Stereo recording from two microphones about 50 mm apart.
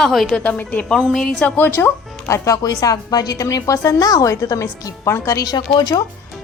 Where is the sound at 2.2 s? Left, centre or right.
Left.